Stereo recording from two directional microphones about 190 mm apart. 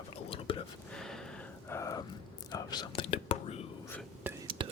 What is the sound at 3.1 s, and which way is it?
Whispering, 35° left (ahead or behind).